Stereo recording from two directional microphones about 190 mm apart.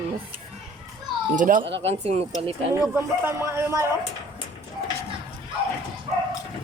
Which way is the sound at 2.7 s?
10° right (ahead or behind).